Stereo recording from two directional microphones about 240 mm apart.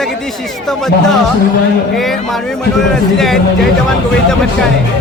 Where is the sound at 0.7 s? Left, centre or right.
Centre.